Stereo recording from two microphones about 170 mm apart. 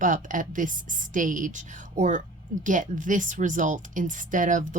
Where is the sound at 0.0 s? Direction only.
50° right (ahead or behind).